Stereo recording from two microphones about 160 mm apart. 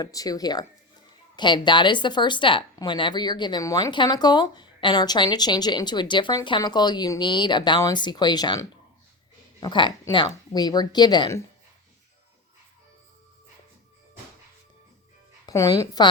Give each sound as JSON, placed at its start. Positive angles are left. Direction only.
{"t": 0.0, "sound": "a woman's voice", "side_deg": 20}
{"t": 15.4, "sound": "speech", "side_deg": 20}